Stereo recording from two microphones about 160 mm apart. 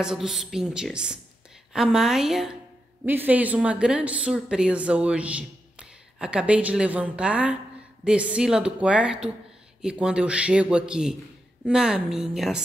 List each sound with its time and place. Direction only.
0.0 s a woman's voice: 5° right (ahead or behind)